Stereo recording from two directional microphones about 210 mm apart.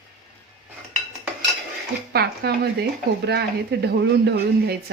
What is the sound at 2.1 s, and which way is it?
Speech, 50° right (ahead or behind).